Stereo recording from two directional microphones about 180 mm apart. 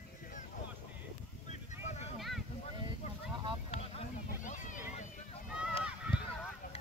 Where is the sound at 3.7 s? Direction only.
40° left (ahead or behind).